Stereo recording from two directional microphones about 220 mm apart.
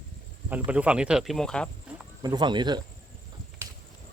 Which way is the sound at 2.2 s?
20° right (ahead or behind).